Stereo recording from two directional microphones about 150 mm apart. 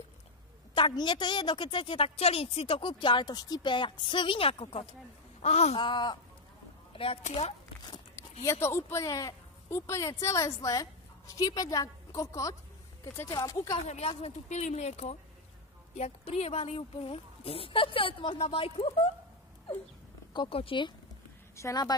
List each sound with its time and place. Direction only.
0.7 s a woman's voice: 35° left (ahead or behind)
5.8 s a woman's voice: 30° left (ahead or behind)
7.8 s a sound: 25° left (ahead or behind)
8.5 s a woman's voice: 15° left (ahead or behind)
13.8 s a woman's voice: 45° left (ahead or behind)
20.3 s a woman's voice: 35° left (ahead or behind)
21.5 s speech: 25° left (ahead or behind)